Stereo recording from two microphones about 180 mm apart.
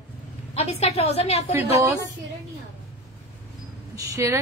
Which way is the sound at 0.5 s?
35° left (ahead or behind).